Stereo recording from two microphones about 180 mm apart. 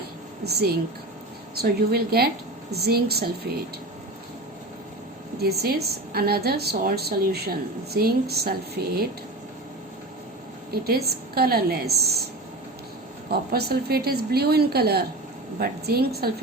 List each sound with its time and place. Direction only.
0.4 s a woman's voice: 65° right (ahead or behind)
5.4 s a woman's voice: 60° right (ahead or behind)
10.7 s a woman's voice: 60° right (ahead or behind)
13.3 s a woman's voice: 60° right (ahead or behind)